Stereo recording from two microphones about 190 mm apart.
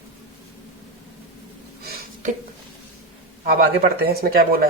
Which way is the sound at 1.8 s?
50° right (ahead or behind).